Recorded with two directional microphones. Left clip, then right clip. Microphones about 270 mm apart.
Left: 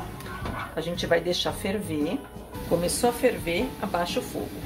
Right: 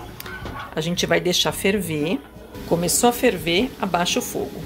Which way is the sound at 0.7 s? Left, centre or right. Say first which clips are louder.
Right 4 dB; right.